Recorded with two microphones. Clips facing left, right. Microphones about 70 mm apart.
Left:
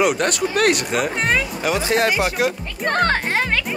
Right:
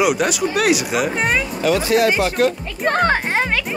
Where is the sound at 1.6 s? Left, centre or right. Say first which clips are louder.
Right 5 dB; left.